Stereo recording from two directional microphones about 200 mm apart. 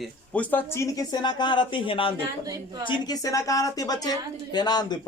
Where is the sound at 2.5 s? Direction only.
20° right (ahead or behind).